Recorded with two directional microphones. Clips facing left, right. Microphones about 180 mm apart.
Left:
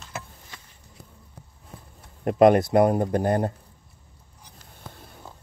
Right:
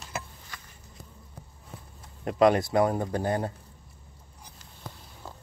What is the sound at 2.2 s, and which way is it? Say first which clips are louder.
Speech: left 5 dB; 50° left (ahead or behind).